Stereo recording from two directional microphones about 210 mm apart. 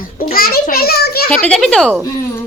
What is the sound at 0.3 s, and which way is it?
Children playing, 45° left (ahead or behind).